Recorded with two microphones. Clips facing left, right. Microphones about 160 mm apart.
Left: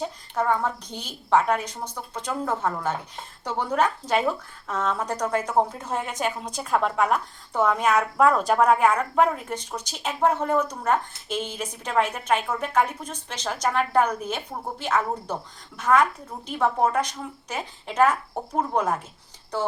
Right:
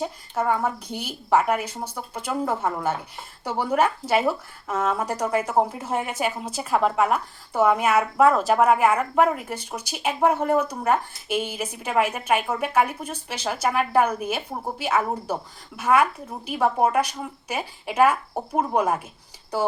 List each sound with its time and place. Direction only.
0.0 s a woman's voice: 5° right (ahead or behind)